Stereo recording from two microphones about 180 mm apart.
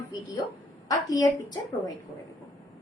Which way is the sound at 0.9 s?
20° left (ahead or behind).